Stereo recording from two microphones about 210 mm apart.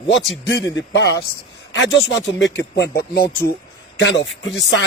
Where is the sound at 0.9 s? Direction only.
55° left (ahead or behind).